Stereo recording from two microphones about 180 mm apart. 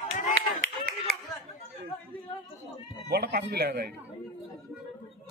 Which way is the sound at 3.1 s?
60° right (ahead or behind).